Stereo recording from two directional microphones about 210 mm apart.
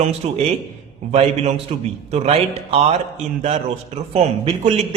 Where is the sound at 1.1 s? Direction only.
30° right (ahead or behind).